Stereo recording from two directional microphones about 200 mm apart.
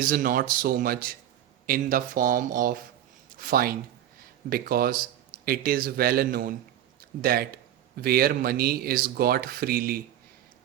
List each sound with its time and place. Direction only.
0.0 s speech: 45° right (ahead or behind)